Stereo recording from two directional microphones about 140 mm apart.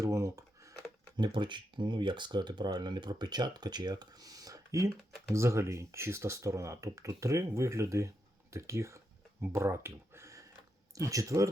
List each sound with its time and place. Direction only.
0.0 s speech: 20° right (ahead or behind)